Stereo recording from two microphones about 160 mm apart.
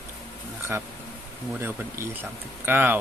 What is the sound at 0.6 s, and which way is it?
Speech, 15° right (ahead or behind).